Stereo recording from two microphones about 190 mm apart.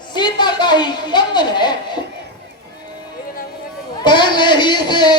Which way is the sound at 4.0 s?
25° left (ahead or behind).